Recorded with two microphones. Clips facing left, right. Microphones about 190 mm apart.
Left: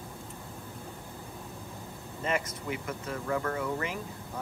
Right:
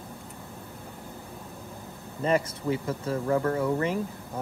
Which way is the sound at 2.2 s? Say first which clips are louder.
Right 7 dB; 35° right (ahead or behind).